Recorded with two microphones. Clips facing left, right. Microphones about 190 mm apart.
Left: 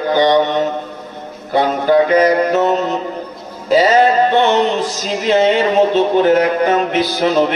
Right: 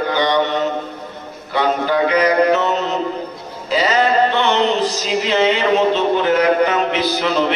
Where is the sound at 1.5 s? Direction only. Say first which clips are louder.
Left 5 dB; 45° left (ahead or behind).